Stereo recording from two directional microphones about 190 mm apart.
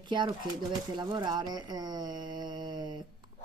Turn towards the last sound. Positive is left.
turn(degrees=-25)  # may be behind; listen again after turning